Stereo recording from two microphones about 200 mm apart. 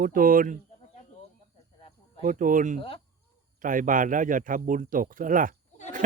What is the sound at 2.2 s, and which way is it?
Speech, 40° right (ahead or behind).